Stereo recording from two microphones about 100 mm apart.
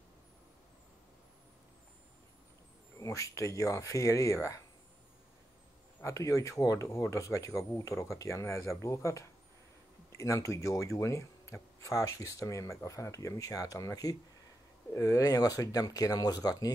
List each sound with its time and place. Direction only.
3.0 s speech: 30° left (ahead or behind)
6.0 s speech: 30° left (ahead or behind)